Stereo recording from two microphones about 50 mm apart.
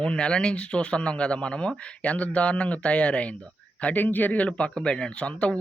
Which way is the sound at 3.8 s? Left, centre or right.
Left.